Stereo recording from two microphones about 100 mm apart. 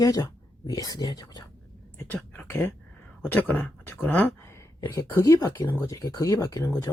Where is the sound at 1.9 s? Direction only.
20° left (ahead or behind).